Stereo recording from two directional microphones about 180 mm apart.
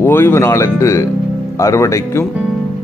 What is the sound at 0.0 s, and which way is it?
Speech, 10° left (ahead or behind).